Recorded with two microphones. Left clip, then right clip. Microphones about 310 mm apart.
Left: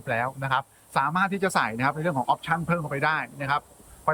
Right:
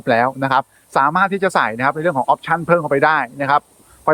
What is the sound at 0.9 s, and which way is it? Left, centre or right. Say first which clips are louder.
Speech: right 9 dB; centre.